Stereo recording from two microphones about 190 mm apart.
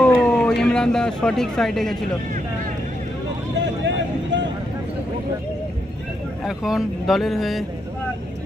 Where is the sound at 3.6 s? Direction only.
70° right (ahead or behind).